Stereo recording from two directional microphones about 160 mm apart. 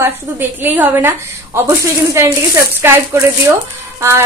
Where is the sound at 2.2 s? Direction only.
15° right (ahead or behind).